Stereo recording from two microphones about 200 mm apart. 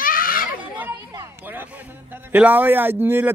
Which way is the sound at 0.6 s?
10° right (ahead or behind).